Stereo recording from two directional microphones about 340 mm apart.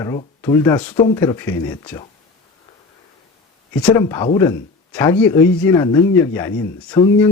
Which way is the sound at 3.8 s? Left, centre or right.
Centre.